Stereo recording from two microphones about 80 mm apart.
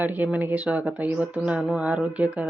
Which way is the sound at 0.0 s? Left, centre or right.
Right.